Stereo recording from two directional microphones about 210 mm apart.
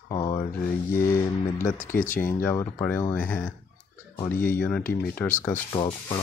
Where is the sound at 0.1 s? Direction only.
20° left (ahead or behind).